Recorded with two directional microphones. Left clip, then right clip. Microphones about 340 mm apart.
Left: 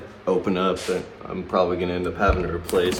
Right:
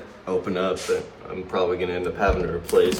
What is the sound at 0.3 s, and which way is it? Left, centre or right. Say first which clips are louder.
Speech: left 2 dB; centre.